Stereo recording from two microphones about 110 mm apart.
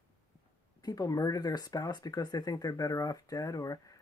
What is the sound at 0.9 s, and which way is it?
Speech, 35° left (ahead or behind).